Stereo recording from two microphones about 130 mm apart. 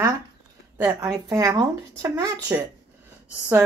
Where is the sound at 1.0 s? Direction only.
25° right (ahead or behind).